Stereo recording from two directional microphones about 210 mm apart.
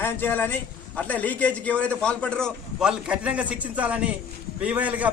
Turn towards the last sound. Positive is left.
turn(degrees=-5)  # may be behind; listen again after turning